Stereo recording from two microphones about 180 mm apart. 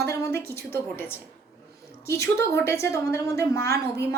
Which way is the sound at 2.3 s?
15° left (ahead or behind).